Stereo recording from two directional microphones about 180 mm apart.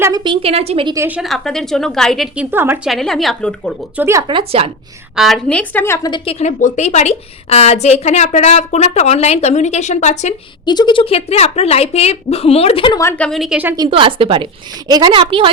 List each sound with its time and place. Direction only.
0.0 s a woman's voice: 20° right (ahead or behind)
0.4 s a woman's voice: 35° right (ahead or behind)
0.9 s a woman's voice: 10° right (ahead or behind)
2.9 s a woman's voice: centre (ahead or behind)
3.9 s speech: 15° right (ahead or behind)
4.3 s a woman's voice: 30° right (ahead or behind)
5.1 s a woman's voice: centre (ahead or behind); by 6.3 s 25° left (ahead or behind)
6.4 s a woman's voice: 40° left (ahead or behind)
10.7 s a woman's voice: 25° left (ahead or behind)
13.0 s a woman's voice: 10° left (ahead or behind); by 13.7 s 5° right (ahead or behind)
13.7 s a woman's voice: 25° right (ahead or behind)